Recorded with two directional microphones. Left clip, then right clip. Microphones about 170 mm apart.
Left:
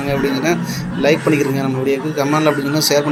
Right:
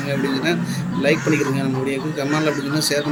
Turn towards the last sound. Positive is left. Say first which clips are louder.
# left 5 dB
turn(degrees=10)  # may be behind; listen again after turning